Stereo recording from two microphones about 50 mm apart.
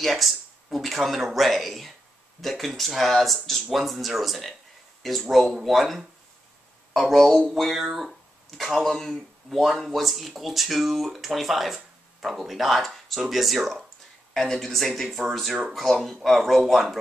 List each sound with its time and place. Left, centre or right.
0.0 s speech: centre
7.4 s speech: centre
14.3 s speech: centre